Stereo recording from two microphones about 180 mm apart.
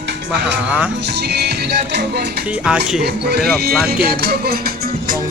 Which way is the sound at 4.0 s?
60° right (ahead or behind).